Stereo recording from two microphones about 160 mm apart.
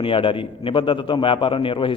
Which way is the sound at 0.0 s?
35° left (ahead or behind).